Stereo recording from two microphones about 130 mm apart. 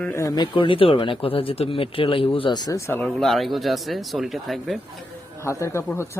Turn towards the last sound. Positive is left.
turn(degrees=20)  # may be behind; listen again after turning